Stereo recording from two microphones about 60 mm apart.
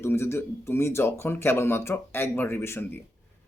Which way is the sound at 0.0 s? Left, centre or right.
Left.